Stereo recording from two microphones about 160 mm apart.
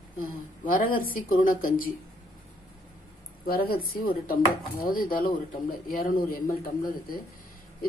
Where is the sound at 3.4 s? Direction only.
70° left (ahead or behind).